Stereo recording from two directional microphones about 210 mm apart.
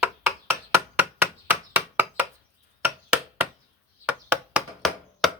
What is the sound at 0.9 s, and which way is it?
Chopping, 10° right (ahead or behind).